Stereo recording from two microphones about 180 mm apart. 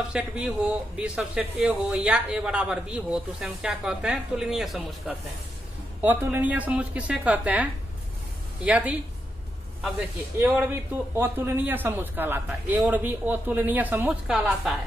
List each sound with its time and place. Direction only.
0.1 s a man's voice: 5° right (ahead or behind)
8.6 s a man's voice: 5° right (ahead or behind)
9.9 s a man's voice: 10° right (ahead or behind)